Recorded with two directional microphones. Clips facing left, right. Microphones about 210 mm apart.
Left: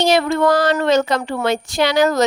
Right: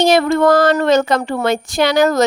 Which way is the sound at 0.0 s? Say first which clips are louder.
Right 3 dB; 50° right (ahead or behind).